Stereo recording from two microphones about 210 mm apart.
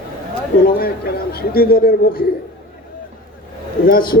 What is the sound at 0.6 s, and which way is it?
Speech, 45° left (ahead or behind).